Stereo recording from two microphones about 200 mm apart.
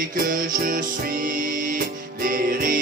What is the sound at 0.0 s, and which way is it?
Music, 45° right (ahead or behind).